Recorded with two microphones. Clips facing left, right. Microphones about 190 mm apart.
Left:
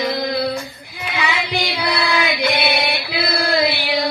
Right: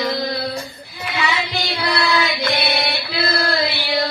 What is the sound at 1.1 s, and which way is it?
Child singing, 15° left (ahead or behind).